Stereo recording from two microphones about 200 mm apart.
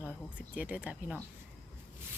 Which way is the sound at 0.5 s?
5° right (ahead or behind).